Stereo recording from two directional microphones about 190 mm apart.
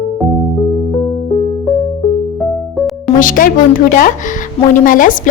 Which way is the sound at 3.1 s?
45° left (ahead or behind).